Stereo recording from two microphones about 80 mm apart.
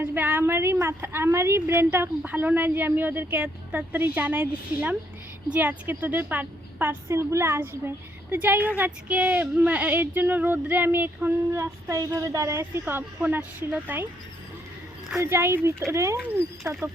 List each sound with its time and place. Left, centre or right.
0.0 s a woman's voice: right
7.1 s a woman's voice: right
11.5 s a woman's voice: right
15.2 s a woman's voice: right